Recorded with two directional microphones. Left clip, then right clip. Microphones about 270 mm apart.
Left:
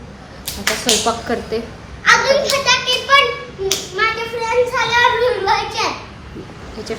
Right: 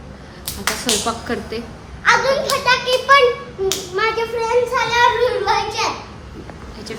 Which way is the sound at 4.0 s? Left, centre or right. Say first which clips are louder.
Left 1 dB; centre.